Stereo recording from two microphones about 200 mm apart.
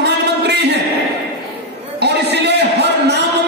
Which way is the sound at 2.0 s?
60° right (ahead or behind).